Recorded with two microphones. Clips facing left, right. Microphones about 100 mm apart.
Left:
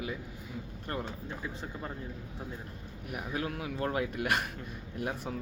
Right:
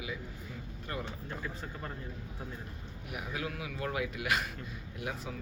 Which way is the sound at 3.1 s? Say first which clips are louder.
Left 3 dB; 40° left (ahead or behind).